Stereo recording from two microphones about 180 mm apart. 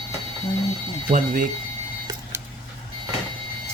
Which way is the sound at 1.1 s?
45° right (ahead or behind).